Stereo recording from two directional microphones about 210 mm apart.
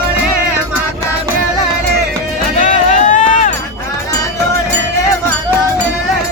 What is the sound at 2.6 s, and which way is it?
Run, 35° left (ahead or behind).